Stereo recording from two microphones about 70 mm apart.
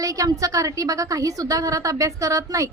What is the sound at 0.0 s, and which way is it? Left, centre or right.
A woman's voice, right.